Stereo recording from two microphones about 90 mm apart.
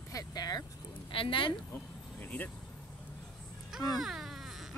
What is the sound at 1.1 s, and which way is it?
Speech, 70° left (ahead or behind).